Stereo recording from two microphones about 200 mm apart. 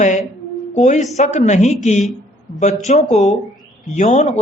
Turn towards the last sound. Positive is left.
turn(degrees=35)  # may be behind; listen again after turning